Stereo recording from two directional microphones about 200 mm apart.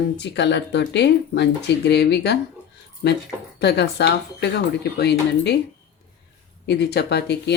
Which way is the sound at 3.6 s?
55° left (ahead or behind).